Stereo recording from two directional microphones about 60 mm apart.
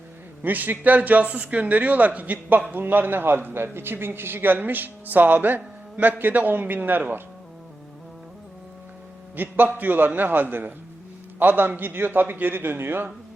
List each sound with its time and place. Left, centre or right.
0.4 s a man's voice: right
9.3 s a man's voice: right